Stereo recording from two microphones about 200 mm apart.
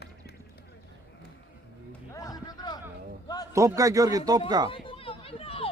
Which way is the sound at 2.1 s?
20° left (ahead or behind).